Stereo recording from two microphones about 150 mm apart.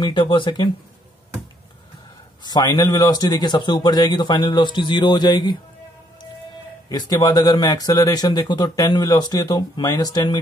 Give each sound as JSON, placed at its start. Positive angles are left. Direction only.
{"t": 0.0, "sound": "speech", "side_deg": 30}
{"t": 2.4, "sound": "speech", "side_deg": 25}
{"t": 6.9, "sound": "speech", "side_deg": 25}